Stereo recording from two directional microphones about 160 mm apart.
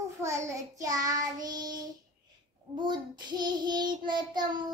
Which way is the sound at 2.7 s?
30° right (ahead or behind).